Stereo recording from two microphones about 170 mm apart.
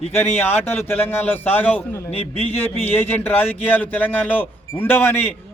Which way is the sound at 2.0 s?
35° left (ahead or behind).